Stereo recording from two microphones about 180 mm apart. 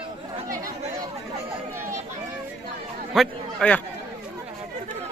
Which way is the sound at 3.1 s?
5° left (ahead or behind).